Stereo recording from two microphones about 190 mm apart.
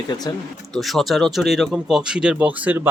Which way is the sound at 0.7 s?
Centre (ahead or behind).